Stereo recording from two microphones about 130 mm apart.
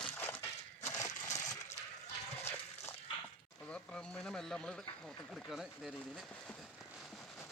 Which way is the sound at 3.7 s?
5° left (ahead or behind).